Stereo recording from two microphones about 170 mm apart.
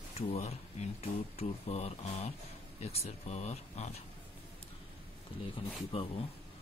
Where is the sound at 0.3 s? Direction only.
40° left (ahead or behind).